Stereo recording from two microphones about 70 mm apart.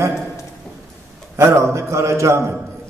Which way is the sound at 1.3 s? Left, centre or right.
Right.